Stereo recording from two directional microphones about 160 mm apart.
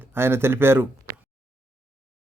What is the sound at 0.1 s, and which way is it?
Speech, 15° right (ahead or behind).